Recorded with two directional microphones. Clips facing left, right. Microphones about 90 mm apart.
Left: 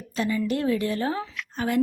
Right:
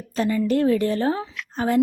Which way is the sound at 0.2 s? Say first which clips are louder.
Right 5 dB; 40° right (ahead or behind).